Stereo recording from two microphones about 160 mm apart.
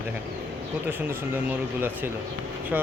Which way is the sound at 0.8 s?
10° right (ahead or behind).